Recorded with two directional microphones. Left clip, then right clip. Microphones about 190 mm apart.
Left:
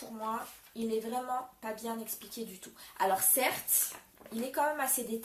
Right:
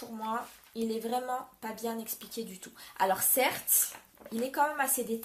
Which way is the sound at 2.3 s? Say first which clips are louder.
Right 3 dB; 50° right (ahead or behind).